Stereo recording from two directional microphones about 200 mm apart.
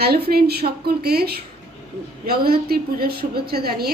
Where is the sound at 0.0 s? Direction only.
50° right (ahead or behind).